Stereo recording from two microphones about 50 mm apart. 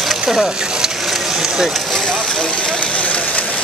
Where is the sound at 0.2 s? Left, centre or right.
Centre.